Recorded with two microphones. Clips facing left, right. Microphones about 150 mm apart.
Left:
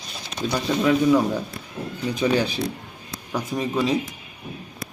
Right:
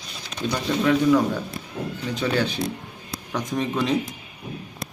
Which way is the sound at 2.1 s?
10° left (ahead or behind).